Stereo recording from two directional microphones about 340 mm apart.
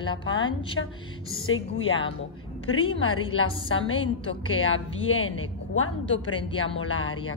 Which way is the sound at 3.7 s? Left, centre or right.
Left.